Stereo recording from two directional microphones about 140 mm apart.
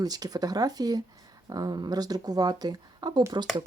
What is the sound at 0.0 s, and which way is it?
Speech, 25° right (ahead or behind).